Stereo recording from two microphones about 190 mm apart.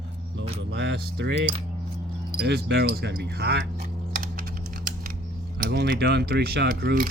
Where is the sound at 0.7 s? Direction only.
70° right (ahead or behind).